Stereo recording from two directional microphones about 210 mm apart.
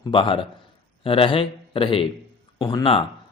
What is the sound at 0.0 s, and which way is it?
Speech, 25° left (ahead or behind).